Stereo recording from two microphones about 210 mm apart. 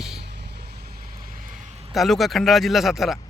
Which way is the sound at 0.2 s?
55° right (ahead or behind).